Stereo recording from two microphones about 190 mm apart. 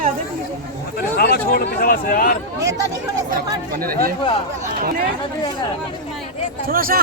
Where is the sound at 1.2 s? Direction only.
55° left (ahead or behind).